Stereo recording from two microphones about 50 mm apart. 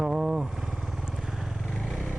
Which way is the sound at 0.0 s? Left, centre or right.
Centre.